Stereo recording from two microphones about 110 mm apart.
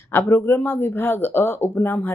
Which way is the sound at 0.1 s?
20° left (ahead or behind).